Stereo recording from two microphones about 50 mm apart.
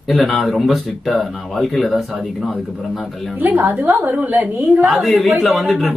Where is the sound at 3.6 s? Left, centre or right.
Right.